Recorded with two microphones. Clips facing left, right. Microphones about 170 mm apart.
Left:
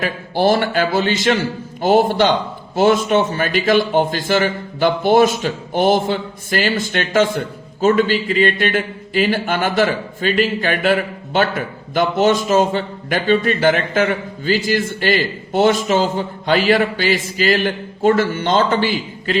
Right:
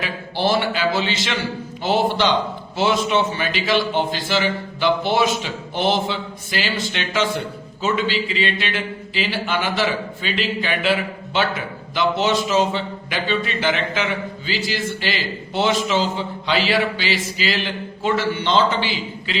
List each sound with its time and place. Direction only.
0.0 s a man's voice: 50° left (ahead or behind)